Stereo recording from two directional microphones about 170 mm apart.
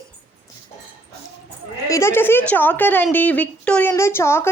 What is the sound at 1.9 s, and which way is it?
A woman's voice, 15° left (ahead or behind).